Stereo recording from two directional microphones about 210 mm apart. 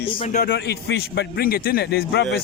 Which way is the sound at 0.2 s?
40° left (ahead or behind).